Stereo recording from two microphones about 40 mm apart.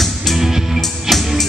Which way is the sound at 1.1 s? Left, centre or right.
Centre.